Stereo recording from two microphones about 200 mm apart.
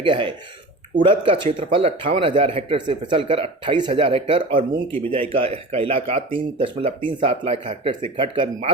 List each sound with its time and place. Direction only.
0.0 s speech: 25° right (ahead or behind)
4.9 s speech: 10° left (ahead or behind)
5.3 s speech: 25° right (ahead or behind)